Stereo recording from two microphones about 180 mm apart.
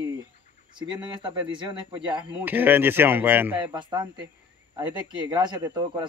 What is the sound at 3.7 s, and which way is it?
Speech, 25° right (ahead or behind).